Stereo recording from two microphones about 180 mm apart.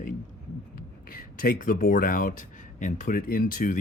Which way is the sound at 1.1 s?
50° left (ahead or behind).